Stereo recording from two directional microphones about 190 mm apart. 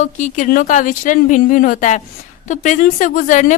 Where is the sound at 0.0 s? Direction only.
40° left (ahead or behind).